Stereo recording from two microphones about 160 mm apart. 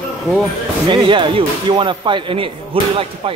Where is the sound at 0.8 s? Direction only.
30° right (ahead or behind).